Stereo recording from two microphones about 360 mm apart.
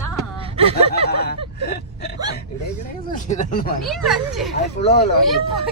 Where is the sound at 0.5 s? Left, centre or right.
Centre.